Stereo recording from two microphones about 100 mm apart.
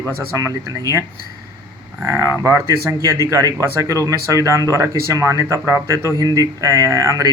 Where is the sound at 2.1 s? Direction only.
30° right (ahead or behind).